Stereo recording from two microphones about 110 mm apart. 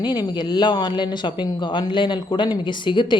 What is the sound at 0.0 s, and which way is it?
Speech, 40° left (ahead or behind).